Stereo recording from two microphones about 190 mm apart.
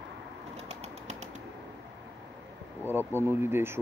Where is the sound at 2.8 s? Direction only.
10° right (ahead or behind).